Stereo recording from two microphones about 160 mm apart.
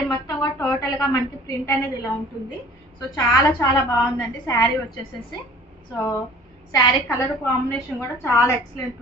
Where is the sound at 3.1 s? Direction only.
20° left (ahead or behind).